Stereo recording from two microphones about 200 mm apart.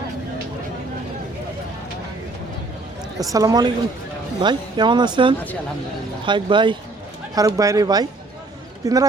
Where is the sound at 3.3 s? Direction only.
20° right (ahead or behind).